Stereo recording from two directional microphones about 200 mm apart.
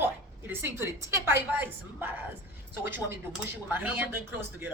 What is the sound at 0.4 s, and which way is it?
A woman's voice, 10° right (ahead or behind).